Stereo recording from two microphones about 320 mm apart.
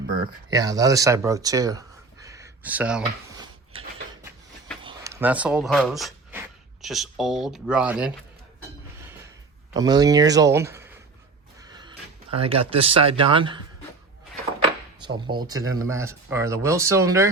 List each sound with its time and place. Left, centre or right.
0.5 s speech: centre
2.2 s a sound: centre
3.7 s a sound: centre
6.8 s speech: centre
9.7 s speech: centre
15.0 s speech: centre